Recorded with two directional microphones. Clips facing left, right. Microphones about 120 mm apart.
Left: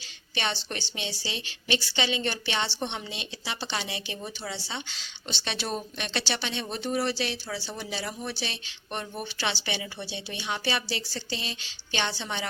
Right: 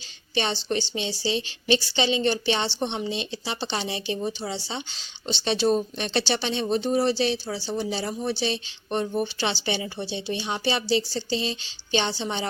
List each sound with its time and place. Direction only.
0.3 s a woman's voice: 25° right (ahead or behind)